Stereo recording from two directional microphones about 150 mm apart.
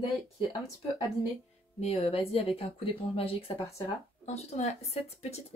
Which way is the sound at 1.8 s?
45° left (ahead or behind).